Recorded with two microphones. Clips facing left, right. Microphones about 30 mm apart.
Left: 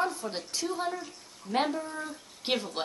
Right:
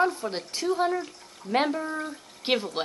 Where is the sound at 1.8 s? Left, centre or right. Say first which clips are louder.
Right 5 dB; right.